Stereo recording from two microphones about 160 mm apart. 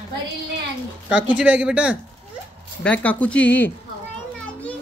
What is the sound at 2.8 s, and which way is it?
Speech, 10° left (ahead or behind).